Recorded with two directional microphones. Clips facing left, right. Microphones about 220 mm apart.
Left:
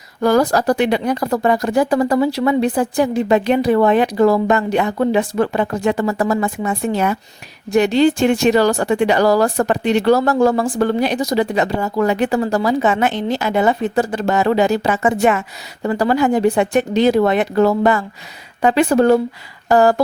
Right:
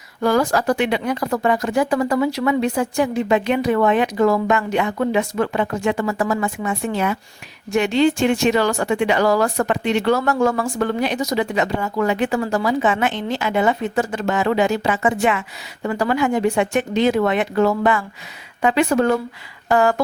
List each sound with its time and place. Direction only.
0.2 s speech: 40° left (ahead or behind)